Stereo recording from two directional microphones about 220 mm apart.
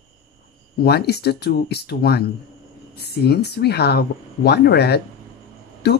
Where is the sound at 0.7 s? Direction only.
45° left (ahead or behind).